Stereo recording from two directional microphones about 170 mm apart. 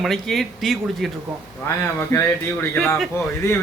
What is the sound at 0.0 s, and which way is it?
Speech, centre (ahead or behind).